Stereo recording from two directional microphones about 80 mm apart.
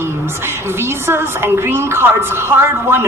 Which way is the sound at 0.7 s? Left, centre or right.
Right.